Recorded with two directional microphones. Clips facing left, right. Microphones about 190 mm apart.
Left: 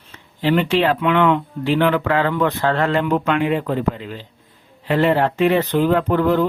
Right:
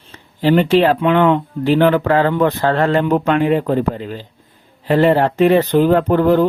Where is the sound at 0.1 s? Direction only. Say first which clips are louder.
Right 4 dB; 40° right (ahead or behind).